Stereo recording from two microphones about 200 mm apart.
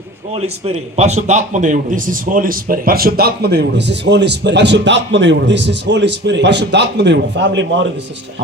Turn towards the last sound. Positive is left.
turn(degrees=-65)  # may be behind; listen again after turning